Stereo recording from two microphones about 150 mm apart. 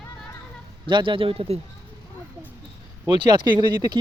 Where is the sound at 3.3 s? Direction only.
25° right (ahead or behind).